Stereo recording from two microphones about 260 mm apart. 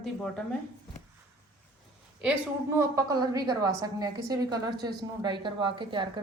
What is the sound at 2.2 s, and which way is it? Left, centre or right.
A woman's voice, centre.